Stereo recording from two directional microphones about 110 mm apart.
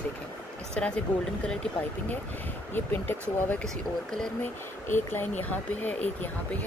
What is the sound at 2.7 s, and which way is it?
Speech, 20° left (ahead or behind).